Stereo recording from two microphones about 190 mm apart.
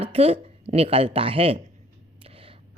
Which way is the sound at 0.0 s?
30° right (ahead or behind).